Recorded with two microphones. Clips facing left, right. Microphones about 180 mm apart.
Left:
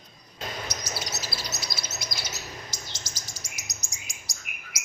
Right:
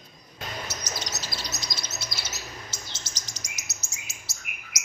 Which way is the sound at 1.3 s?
10° left (ahead or behind).